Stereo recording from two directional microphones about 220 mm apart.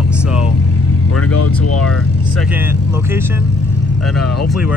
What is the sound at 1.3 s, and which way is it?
Speech, 90° left.